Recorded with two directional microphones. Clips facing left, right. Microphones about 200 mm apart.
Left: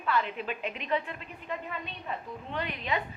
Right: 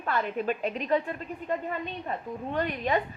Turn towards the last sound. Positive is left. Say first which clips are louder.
# right 6 dB
turn(degrees=-45)  # may be behind; listen again after turning